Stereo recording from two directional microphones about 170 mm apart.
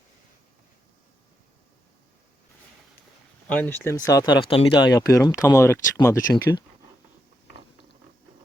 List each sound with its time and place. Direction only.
3.5 s speech: 10° left (ahead or behind)